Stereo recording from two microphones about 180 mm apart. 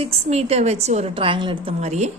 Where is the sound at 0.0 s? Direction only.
35° right (ahead or behind).